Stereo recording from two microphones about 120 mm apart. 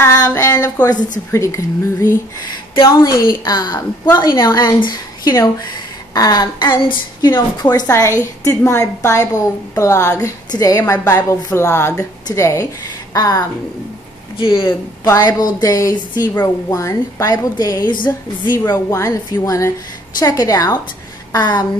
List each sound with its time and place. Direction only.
0.0 s a sound: 25° left (ahead or behind)
1.3 s a woman's voice: 25° left (ahead or behind); by 7.4 s 40° left (ahead or behind)
7.8 s a woman's voice: 25° left (ahead or behind)
14.3 s speech: 45° left (ahead or behind)
15.1 s a woman's voice: 35° left (ahead or behind)
18.0 s a woman's voice: 15° left (ahead or behind); by 21.6 s 35° left (ahead or behind)